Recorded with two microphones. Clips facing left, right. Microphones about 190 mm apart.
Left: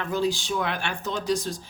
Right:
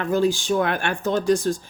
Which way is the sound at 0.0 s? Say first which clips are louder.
Right 5 dB; 50° right (ahead or behind).